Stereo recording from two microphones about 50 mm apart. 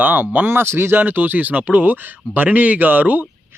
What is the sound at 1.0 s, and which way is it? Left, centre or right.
Speech, right.